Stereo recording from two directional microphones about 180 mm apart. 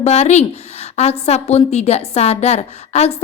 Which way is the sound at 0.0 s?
35° left (ahead or behind).